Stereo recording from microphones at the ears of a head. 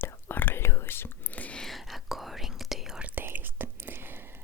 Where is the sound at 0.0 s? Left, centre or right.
Left.